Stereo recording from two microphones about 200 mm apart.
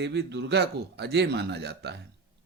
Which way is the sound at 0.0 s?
60° right (ahead or behind).